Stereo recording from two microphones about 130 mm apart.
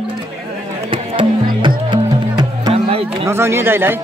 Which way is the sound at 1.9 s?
35° right (ahead or behind).